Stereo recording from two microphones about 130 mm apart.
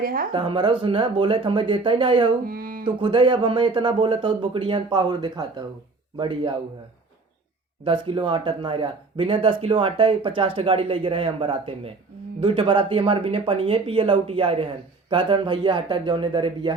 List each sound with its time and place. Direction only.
0.0 s a woman's voice: 90° right
0.3 s speech: 40° right (ahead or behind)
2.5 s a sound: 90° right
2.8 s speech: 40° right (ahead or behind)
7.9 s speech: 40° right (ahead or behind)